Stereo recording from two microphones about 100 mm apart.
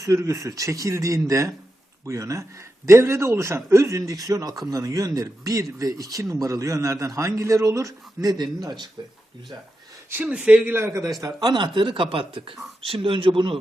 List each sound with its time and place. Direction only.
0.0 s a man's voice: 35° right (ahead or behind); by 9.1 s 50° right (ahead or behind)
10.1 s speech: 15° right (ahead or behind)
10.8 s speech: 30° right (ahead or behind); by 13.6 s 60° right (ahead or behind)